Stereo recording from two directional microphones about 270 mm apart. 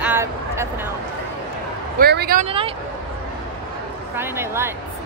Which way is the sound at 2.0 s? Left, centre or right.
Right.